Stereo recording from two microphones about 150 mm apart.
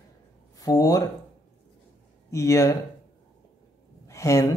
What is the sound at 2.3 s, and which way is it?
Speech, 20° left (ahead or behind).